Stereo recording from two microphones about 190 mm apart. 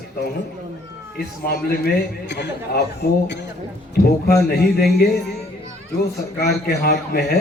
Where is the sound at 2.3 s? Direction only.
65° left (ahead or behind).